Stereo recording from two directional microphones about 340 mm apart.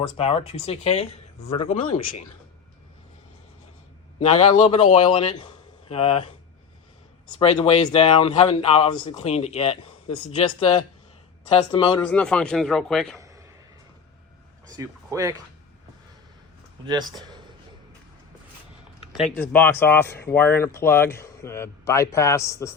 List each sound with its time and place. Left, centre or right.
0.2 s a man's voice: centre
4.2 s a man's voice: centre
12.0 s speech: centre
13.1 s a sound: centre
14.8 s speech: centre
16.8 s speech: centre
19.1 s a man's voice: centre